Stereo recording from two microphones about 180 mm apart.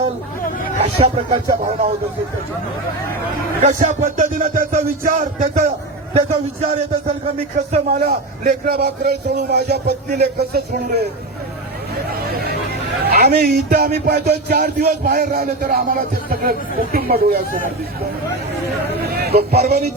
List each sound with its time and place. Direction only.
0.9 s speech: 30° right (ahead or behind)
3.6 s a man's voice: 45° right (ahead or behind)
6.1 s a man's voice: 35° right (ahead or behind); by 11.0 s 65° right (ahead or behind)
13.1 s a man's voice: 60° right (ahead or behind)
19.2 s a man's voice: 60° right (ahead or behind)